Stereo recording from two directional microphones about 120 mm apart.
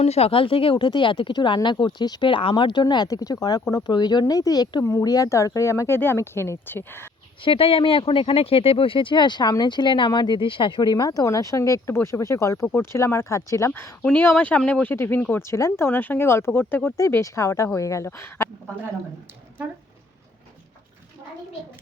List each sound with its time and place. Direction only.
0.0 s speech: 60° left (ahead or behind); by 7.1 s 20° left (ahead or behind)
7.4 s speech: 50° left (ahead or behind); by 18.4 s 25° left (ahead or behind)